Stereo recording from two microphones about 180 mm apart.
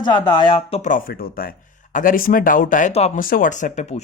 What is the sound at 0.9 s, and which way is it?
Speech, 50° left (ahead or behind).